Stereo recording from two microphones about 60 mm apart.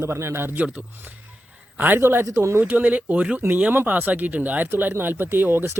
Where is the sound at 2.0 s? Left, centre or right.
Right.